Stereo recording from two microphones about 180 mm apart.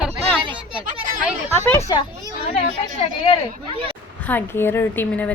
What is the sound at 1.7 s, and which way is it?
Speech, 15° left (ahead or behind).